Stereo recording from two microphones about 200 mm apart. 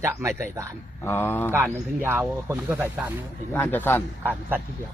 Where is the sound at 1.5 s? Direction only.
10° right (ahead or behind).